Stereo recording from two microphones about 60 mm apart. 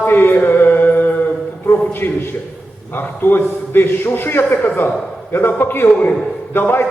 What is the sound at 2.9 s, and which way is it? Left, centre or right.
A man's voice, left.